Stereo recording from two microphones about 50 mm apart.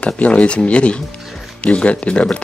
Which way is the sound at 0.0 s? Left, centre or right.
Left.